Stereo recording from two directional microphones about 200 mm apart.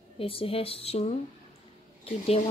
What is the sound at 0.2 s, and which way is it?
Speech, 30° left (ahead or behind).